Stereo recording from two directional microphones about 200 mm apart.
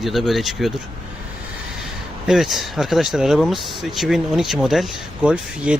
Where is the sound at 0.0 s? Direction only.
Centre (ahead or behind).